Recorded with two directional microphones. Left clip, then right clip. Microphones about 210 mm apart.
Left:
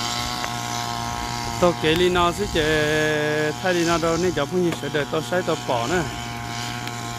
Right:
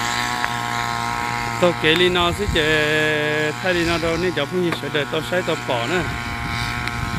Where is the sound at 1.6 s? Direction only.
5° left (ahead or behind).